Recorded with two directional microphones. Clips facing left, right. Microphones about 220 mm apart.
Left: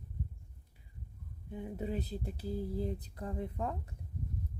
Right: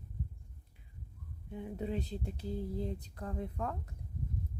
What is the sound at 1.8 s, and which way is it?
Speech, 5° left (ahead or behind).